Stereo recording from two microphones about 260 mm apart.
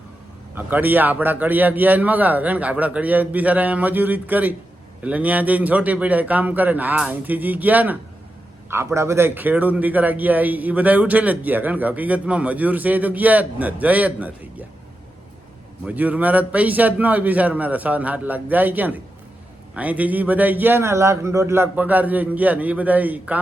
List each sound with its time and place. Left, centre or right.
0.5 s a man's voice: centre
15.8 s a man's voice: centre